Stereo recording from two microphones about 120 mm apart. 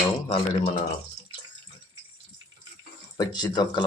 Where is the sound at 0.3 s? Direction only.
50° left (ahead or behind).